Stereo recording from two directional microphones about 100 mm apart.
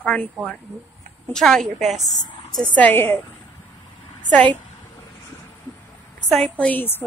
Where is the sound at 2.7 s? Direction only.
20° left (ahead or behind).